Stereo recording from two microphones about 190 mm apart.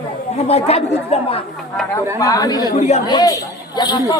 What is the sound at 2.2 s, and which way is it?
Speech, 20° left (ahead or behind).